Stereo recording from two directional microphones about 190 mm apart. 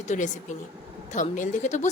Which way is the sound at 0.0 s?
40° left (ahead or behind).